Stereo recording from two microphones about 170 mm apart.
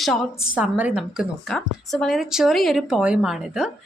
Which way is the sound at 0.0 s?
Centre (ahead or behind).